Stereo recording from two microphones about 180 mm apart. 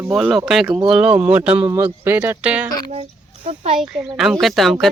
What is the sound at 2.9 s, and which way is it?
Speech, 35° right (ahead or behind).